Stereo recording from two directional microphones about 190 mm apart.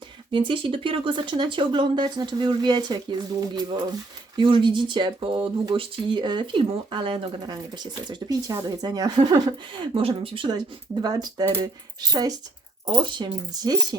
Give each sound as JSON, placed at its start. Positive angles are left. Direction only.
{"t": 0.3, "sound": "speech", "side_deg": -25}